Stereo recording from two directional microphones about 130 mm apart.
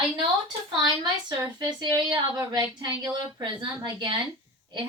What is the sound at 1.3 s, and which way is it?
A woman's voice, 35° right (ahead or behind).